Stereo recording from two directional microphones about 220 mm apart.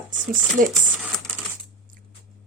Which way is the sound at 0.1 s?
35° right (ahead or behind).